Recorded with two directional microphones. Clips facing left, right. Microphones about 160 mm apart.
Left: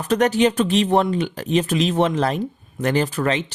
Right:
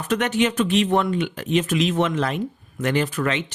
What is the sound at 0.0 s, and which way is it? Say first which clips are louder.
Speech: left 4 dB; 35° left (ahead or behind).